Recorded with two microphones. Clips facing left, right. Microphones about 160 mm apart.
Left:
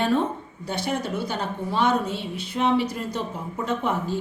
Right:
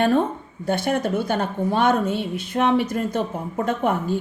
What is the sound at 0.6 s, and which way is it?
A woman's voice, 50° right (ahead or behind).